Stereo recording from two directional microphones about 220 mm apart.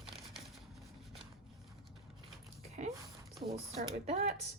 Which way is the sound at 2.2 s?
30° right (ahead or behind).